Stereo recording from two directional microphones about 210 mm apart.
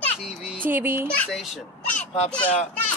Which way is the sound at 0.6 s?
10° right (ahead or behind).